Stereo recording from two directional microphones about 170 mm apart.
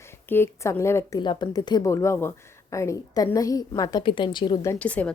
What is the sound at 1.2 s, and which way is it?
A woman's voice, 25° left (ahead or behind).